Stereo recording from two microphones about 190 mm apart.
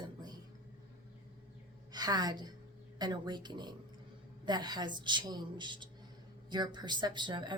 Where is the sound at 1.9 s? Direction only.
20° right (ahead or behind).